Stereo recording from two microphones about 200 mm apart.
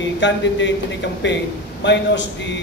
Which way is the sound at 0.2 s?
60° left (ahead or behind).